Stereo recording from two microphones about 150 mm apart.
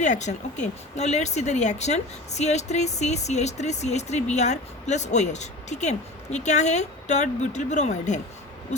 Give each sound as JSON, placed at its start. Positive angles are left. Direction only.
{"t": 0.0, "sound": "speech", "side_deg": 50}